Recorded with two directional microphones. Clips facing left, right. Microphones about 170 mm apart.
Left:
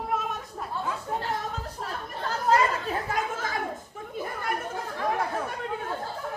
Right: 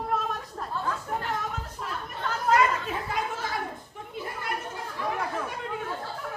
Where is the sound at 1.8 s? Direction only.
35° left (ahead or behind).